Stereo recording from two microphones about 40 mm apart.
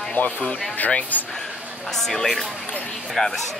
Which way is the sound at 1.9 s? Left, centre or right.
Centre.